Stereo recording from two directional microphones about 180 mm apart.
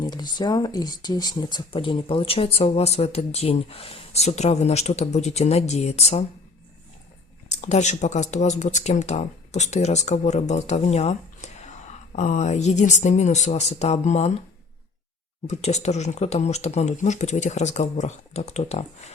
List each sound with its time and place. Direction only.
0.0 s speech: 25° left (ahead or behind)
7.5 s speech: 40° left (ahead or behind)
15.4 s speech: 40° left (ahead or behind)